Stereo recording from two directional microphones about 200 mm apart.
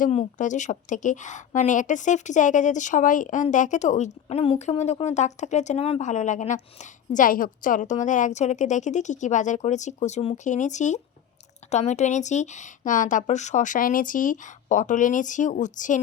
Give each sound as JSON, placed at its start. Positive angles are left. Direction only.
{"t": 0.0, "sound": "a woman's voice", "side_deg": 35}